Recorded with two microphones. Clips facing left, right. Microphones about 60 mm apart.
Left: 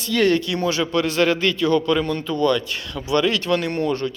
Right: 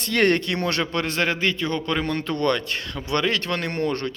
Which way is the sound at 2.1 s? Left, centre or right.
Right.